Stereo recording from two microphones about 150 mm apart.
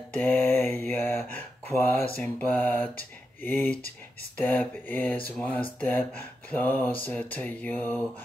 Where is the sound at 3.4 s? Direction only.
15° left (ahead or behind).